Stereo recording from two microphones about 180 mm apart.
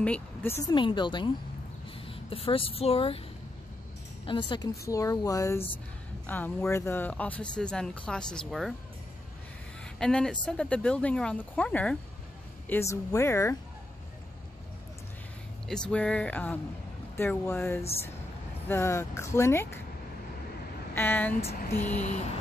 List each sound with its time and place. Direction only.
0.0 s speech: 10° left (ahead or behind)
0.7 s a woman's voice: 25° left (ahead or behind)
4.3 s a woman's voice: 25° left (ahead or behind); by 8.7 s centre (ahead or behind)
9.9 s speech: 5° left (ahead or behind)
15.7 s speech: 5° left (ahead or behind)
20.9 s speech: 10° left (ahead or behind)